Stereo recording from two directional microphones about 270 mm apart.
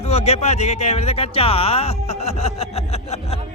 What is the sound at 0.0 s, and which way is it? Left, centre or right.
Speech, left.